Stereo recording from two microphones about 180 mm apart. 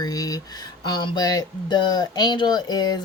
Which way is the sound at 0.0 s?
20° left (ahead or behind).